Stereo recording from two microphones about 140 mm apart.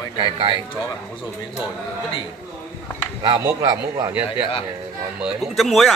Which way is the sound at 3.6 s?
30° right (ahead or behind).